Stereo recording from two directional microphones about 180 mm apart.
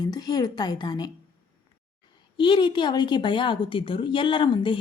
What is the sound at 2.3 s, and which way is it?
A woman's voice, 25° left (ahead or behind).